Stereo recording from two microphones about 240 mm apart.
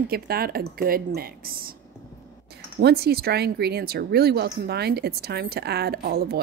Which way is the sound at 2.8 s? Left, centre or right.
Right.